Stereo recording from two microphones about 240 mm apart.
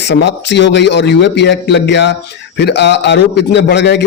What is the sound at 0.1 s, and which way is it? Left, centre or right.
A man's voice, left.